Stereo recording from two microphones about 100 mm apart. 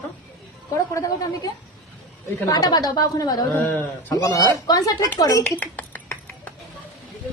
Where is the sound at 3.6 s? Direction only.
20° left (ahead or behind).